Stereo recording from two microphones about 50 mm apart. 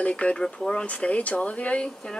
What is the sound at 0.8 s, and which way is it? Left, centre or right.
Speech, left.